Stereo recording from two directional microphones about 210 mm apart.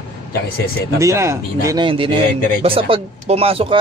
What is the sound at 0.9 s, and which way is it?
A man's voice, 15° right (ahead or behind).